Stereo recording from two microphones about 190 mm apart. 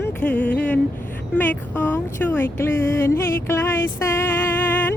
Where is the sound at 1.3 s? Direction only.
10° left (ahead or behind).